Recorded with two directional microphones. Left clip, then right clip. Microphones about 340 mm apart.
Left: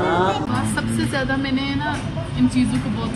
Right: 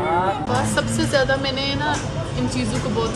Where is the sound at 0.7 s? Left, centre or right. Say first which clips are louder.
Right 6 dB; right.